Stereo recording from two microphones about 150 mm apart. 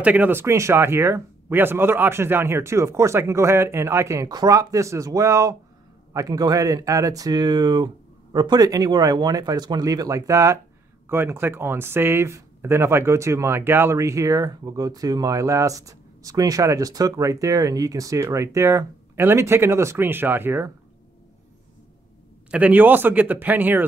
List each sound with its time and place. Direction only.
0.0 s speech: 10° right (ahead or behind)
22.5 s speech: 10° right (ahead or behind)